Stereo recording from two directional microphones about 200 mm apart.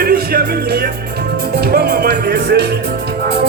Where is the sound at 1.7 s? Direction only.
55° right (ahead or behind).